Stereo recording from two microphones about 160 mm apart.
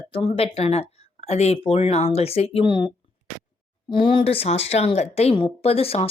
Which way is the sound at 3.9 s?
30° left (ahead or behind).